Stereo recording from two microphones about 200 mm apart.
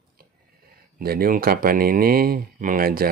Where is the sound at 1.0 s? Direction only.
50° right (ahead or behind).